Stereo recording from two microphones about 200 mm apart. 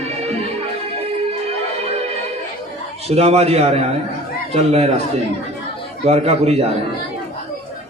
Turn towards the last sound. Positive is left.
turn(degrees=-30)  # may be behind; listen again after turning